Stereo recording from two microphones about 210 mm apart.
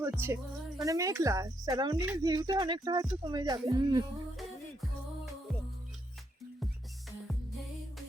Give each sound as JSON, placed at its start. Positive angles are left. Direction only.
{"t": 0.0, "sound": "speech", "side_deg": -10}
{"t": 4.4, "sound": "music", "side_deg": 0}